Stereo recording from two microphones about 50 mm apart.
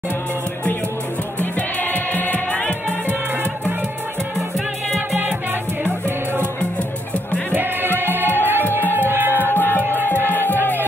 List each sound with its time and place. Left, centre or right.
1.4 s music: left
5.1 s music: right
7.5 s music: right
9.5 s music: left